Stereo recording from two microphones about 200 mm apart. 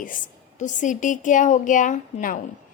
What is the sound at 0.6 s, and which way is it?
A woman's voice, 40° left (ahead or behind).